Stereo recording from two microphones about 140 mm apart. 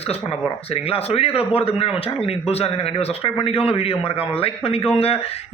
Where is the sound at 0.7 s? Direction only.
45° left (ahead or behind).